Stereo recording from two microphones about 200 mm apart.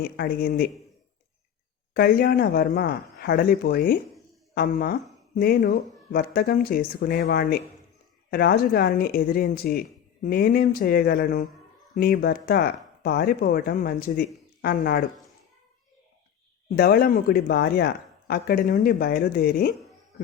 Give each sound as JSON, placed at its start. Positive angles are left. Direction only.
{"t": 0.0, "sound": "speech", "side_deg": 50}
{"t": 1.9, "sound": "speech", "side_deg": 50}
{"t": 16.6, "sound": "speech", "side_deg": 50}